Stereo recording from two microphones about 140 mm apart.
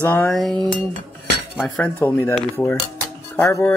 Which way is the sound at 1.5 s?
5° left (ahead or behind).